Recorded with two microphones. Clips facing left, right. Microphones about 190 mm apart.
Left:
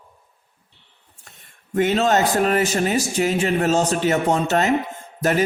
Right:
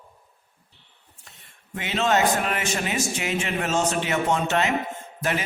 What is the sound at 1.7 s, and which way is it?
Speech, 40° left (ahead or behind).